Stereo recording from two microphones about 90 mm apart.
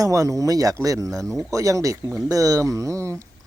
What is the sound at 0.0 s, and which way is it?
Speech, 40° right (ahead or behind).